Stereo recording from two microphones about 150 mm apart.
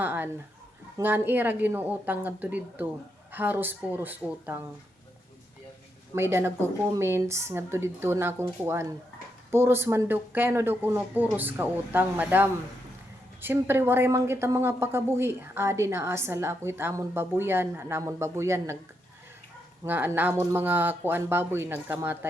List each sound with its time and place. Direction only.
0.0 s speech: 15° right (ahead or behind)
6.1 s speech: 15° right (ahead or behind)
19.8 s speech: 15° right (ahead or behind)